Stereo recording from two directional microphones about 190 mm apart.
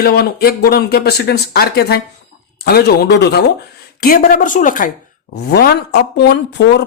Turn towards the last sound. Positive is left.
turn(degrees=60)  # may be behind; listen again after turning